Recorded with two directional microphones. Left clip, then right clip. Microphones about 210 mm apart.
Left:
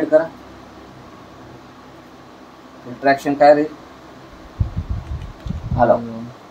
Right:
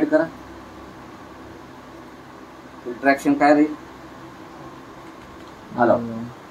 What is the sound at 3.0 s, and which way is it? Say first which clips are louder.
Speech: left 4 dB; 30° left (ahead or behind).